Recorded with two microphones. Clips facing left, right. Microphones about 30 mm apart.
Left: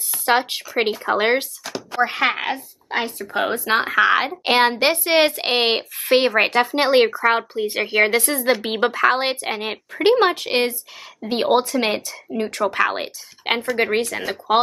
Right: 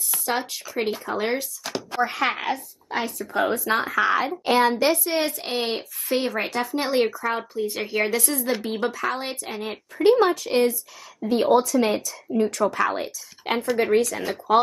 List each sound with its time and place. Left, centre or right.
0.2 s speech: left
1.6 s a sound: centre
2.0 s speech: left
2.9 s speech: left